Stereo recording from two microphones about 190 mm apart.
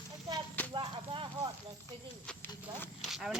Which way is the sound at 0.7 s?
25° right (ahead or behind).